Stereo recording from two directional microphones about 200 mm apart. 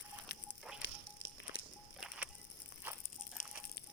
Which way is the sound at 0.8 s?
65° left (ahead or behind).